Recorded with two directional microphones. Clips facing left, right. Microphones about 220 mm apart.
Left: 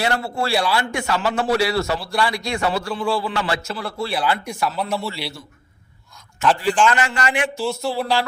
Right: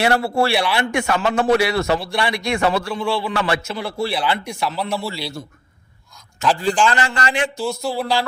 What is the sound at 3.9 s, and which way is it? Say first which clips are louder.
Speech: right 5 dB; 30° right (ahead or behind).